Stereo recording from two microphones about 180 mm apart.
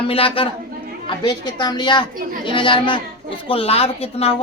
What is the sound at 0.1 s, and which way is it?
A woman's voice, 30° left (ahead or behind).